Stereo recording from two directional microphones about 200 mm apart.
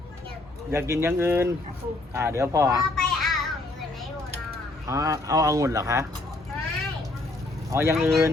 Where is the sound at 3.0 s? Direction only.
Centre (ahead or behind).